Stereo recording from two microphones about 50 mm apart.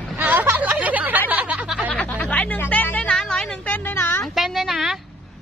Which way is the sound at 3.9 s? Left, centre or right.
Left.